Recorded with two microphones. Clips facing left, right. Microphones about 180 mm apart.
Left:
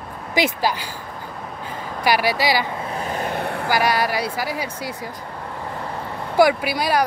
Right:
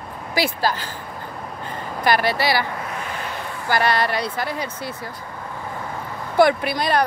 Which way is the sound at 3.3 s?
60° left (ahead or behind).